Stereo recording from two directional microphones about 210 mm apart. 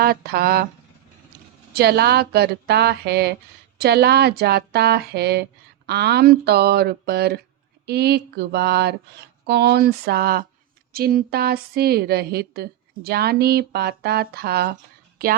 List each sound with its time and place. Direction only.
0.0 s a woman's voice: 45° right (ahead or behind)
1.7 s a woman's voice: 50° right (ahead or behind)